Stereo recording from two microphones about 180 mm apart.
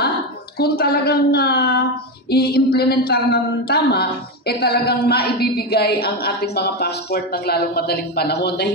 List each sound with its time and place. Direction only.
0.6 s speech: 60° left (ahead or behind)